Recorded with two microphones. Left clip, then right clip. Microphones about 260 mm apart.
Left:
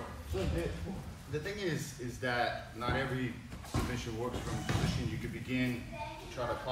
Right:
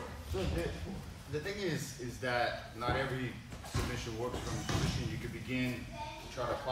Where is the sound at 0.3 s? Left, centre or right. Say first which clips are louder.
Left 1 dB; centre.